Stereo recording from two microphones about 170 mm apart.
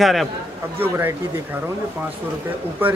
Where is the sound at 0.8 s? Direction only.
10° right (ahead or behind).